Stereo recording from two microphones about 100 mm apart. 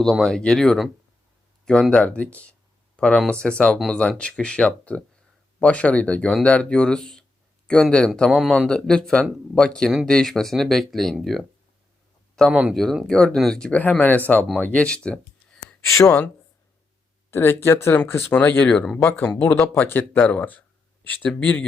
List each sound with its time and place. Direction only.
0.0 s speech: 5° left (ahead or behind)
12.5 s speech: 10° right (ahead or behind)
12.7 s speech: centre (ahead or behind)
15.9 s speech: 30° left (ahead or behind)
17.3 s speech: 25° left (ahead or behind)